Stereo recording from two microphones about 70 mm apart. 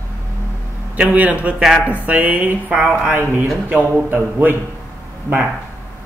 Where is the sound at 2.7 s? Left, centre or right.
Centre.